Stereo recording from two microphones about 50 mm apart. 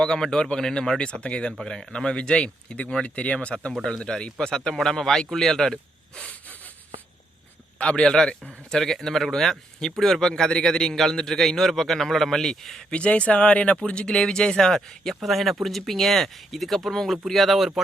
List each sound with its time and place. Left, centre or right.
0.0 s a man's voice: centre
7.8 s a man's voice: left
12.9 s a man's voice: left
15.2 s speech: centre